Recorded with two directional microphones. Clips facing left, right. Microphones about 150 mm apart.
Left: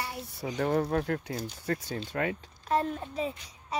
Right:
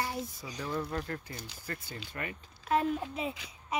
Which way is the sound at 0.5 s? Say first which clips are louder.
Left 8 dB; 70° left (ahead or behind).